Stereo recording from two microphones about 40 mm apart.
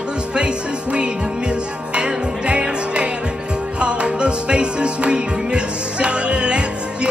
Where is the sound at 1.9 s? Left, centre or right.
Right.